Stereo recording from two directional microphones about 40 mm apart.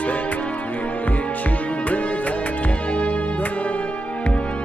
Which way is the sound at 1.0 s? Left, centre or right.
Left.